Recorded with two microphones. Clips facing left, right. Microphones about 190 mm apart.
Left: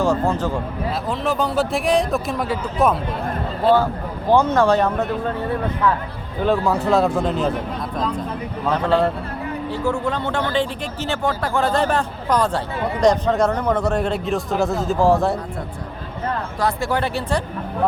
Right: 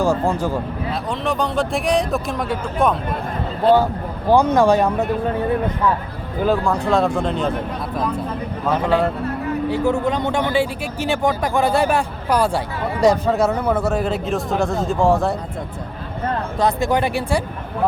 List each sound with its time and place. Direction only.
0.0 s speech: 10° right (ahead or behind)
1.2 s speech: centre (ahead or behind)
4.3 s speech: 15° right (ahead or behind)
6.4 s speech: centre (ahead or behind)
16.6 s speech: 20° right (ahead or behind)